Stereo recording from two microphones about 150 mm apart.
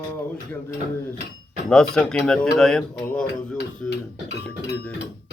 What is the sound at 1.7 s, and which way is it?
A man's voice, 5° left (ahead or behind).